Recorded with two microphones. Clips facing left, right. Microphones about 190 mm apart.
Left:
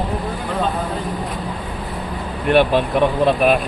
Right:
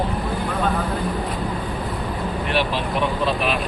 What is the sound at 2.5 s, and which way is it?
Speech, 55° left (ahead or behind).